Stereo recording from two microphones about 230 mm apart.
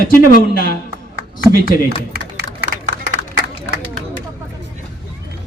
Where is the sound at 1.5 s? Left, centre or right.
Left.